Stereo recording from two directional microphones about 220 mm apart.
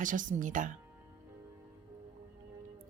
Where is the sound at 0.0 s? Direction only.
35° right (ahead or behind).